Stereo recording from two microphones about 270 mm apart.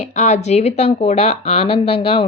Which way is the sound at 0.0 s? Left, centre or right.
Left.